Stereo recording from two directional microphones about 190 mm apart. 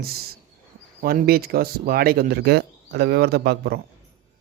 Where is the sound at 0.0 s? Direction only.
55° right (ahead or behind).